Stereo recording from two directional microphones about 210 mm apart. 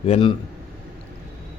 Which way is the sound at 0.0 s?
30° left (ahead or behind).